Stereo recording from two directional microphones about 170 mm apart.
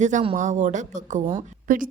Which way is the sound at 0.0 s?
45° right (ahead or behind).